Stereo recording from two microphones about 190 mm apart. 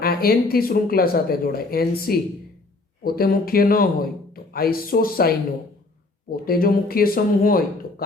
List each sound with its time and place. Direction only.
0.0 s speech: 55° left (ahead or behind)